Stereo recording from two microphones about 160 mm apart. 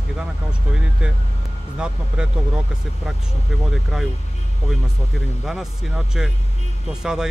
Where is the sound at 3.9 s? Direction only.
5° right (ahead or behind).